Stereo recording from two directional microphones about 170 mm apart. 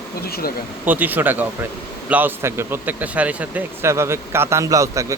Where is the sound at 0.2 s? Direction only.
65° left (ahead or behind).